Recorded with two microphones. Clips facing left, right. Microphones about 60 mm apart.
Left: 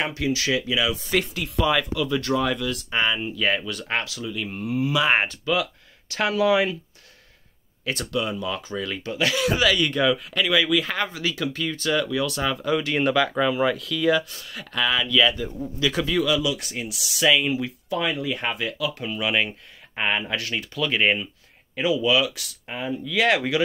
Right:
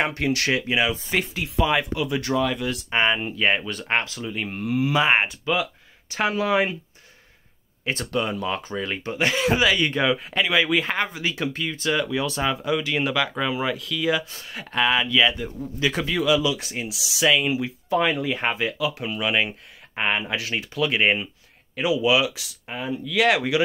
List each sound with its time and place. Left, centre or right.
0.0 s speech: right
1.1 s speech: right
5.1 s speech: centre
6.3 s speech: right
8.1 s speech: right
11.0 s speech: right
12.7 s speech: centre
14.3 s speech: right
17.2 s speech: centre
17.8 s speech: right
18.9 s speech: centre
22.7 s speech: centre